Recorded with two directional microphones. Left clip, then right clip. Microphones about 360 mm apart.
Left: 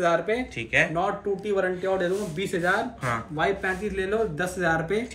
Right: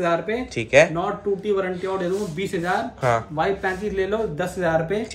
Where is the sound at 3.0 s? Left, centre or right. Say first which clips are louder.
Right 6 dB; centre.